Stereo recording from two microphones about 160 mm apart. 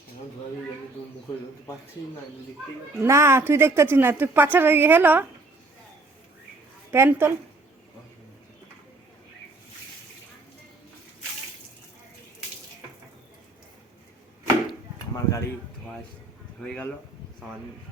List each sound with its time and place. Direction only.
3.0 s speech: 15° right (ahead or behind)
6.9 s speech: 15° right (ahead or behind)
15.1 s speech: 20° left (ahead or behind)
16.6 s speech: 5° left (ahead or behind)